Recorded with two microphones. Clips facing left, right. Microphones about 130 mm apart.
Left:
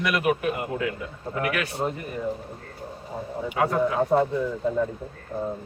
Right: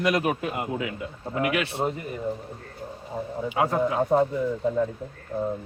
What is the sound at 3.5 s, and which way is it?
Speech, 25° right (ahead or behind).